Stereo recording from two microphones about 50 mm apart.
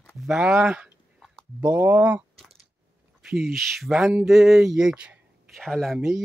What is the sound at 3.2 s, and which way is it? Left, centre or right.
Speech, centre.